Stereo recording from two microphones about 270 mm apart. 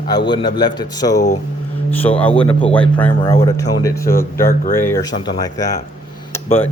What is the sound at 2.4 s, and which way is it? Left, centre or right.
Speech, centre.